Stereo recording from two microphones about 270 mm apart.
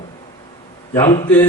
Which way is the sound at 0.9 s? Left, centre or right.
Centre.